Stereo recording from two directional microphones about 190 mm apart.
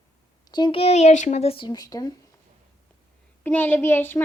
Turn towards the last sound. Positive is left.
turn(degrees=10)  # may be behind; listen again after turning